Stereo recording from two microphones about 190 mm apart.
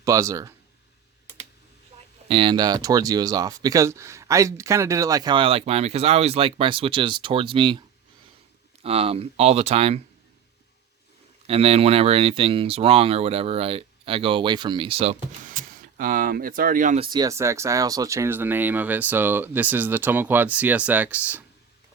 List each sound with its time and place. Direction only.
0.0 s speech: 15° right (ahead or behind)
2.2 s speech: 25° right (ahead or behind)
8.8 s speech: 30° right (ahead or behind)
11.4 s speech: 30° right (ahead or behind)
15.4 s speech: 45° right (ahead or behind)
17.0 s speech: 20° right (ahead or behind)